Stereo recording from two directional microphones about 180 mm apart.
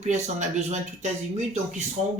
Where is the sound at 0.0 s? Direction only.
40° right (ahead or behind).